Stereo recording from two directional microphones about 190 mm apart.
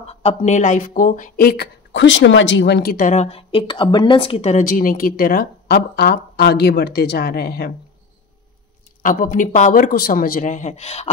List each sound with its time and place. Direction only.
0.0 s speech: 30° left (ahead or behind); by 7.7 s 55° left (ahead or behind)
9.0 s speech: 45° left (ahead or behind)